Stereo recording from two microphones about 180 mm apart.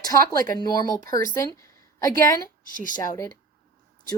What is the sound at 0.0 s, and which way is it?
Speech, 20° left (ahead or behind).